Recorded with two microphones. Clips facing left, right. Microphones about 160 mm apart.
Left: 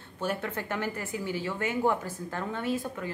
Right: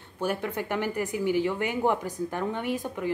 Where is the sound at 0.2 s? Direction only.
10° right (ahead or behind).